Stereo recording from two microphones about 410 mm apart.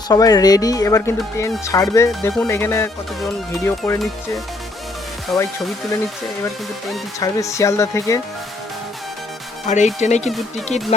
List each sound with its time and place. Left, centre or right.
0.1 s speech: centre
5.3 s speech: centre
6.8 s speech: centre
9.6 s speech: centre